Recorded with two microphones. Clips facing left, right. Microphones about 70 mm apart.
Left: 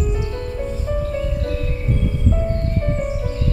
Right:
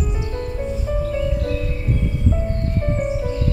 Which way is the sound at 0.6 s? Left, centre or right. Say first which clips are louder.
Even; centre.